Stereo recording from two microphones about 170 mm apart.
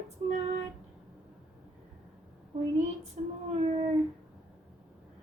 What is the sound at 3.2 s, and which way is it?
Speech, 45° right (ahead or behind).